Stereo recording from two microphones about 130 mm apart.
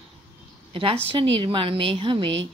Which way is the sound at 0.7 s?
45° right (ahead or behind).